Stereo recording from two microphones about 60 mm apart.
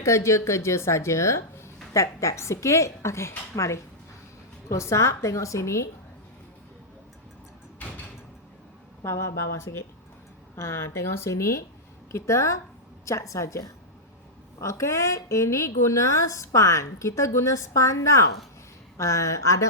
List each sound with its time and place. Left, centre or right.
0.0 s a woman's voice: left
9.0 s a woman's voice: left